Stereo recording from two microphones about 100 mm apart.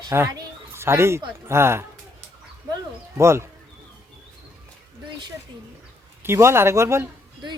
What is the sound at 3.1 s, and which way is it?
Speech, 30° right (ahead or behind).